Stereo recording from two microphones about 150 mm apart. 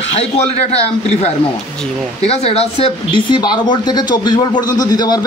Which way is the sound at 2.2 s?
40° left (ahead or behind).